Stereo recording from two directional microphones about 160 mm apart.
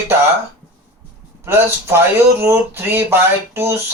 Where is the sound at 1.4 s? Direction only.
15° right (ahead or behind).